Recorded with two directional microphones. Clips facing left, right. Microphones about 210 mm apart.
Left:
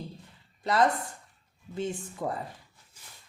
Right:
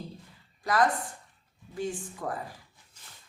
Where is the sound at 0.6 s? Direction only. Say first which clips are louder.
Left 1 dB; 25° left (ahead or behind).